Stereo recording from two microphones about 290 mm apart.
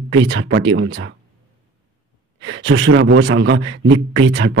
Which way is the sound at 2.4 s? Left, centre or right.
Right.